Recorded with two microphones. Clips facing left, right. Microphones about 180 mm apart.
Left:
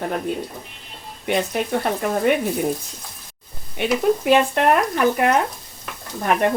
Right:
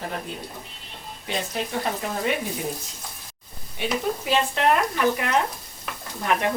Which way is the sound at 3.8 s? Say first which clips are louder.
Left 7 dB; 65° left (ahead or behind).